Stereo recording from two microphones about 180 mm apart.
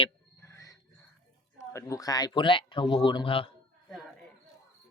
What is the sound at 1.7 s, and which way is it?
Speech, 15° left (ahead or behind).